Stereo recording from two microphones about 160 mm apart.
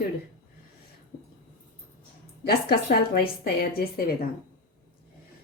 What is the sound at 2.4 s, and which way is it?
A woman's voice, 85° left.